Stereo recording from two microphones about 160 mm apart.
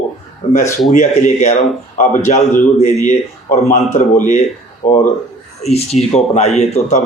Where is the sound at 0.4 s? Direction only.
40° left (ahead or behind).